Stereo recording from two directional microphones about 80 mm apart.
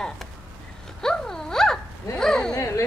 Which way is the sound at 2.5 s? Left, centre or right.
Left.